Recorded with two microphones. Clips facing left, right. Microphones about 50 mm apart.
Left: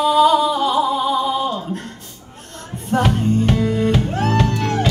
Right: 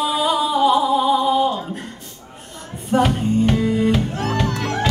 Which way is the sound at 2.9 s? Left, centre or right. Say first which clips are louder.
Even; centre.